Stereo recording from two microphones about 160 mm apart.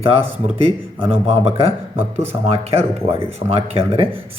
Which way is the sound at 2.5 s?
40° right (ahead or behind).